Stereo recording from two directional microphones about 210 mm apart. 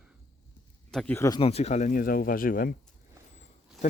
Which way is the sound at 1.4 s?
30° left (ahead or behind).